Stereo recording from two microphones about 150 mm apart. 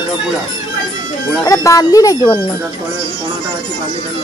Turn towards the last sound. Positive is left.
turn(degrees=25)  # may be behind; listen again after turning